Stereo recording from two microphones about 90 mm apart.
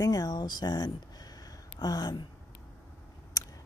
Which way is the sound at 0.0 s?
40° left (ahead or behind).